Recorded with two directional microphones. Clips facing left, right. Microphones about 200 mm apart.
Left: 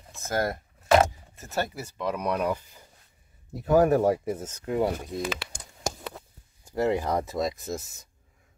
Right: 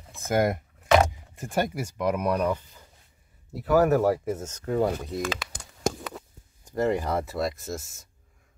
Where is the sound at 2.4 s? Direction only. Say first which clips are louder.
Right 2 dB; 10° left (ahead or behind).